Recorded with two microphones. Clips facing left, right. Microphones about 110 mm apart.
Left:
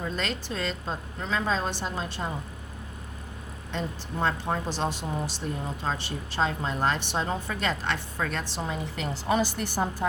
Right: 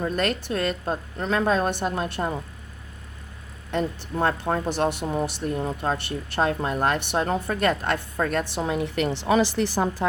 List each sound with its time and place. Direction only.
0.0 s speech: 55° right (ahead or behind)
3.7 s speech: 55° right (ahead or behind); by 10.1 s 90° right